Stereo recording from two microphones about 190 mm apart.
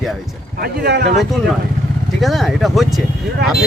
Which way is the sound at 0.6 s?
55° right (ahead or behind).